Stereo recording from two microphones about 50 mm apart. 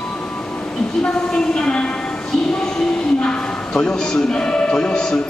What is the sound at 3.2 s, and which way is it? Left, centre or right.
Music, centre.